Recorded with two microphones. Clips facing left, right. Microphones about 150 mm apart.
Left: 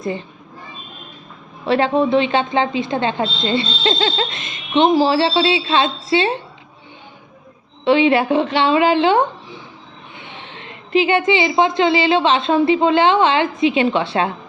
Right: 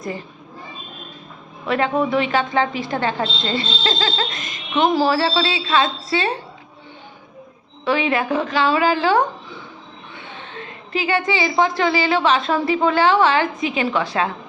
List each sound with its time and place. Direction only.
1.6 s a woman's voice: 30° left (ahead or behind)
7.9 s a woman's voice: 25° left (ahead or behind)